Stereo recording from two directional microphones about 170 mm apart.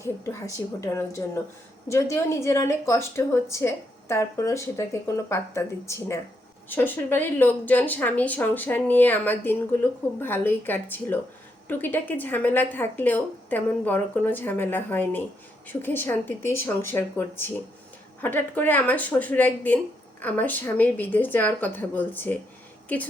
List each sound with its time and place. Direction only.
0.0 s a woman's voice: 15° left (ahead or behind)